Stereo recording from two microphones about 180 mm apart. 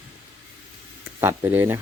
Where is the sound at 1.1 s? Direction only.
15° right (ahead or behind).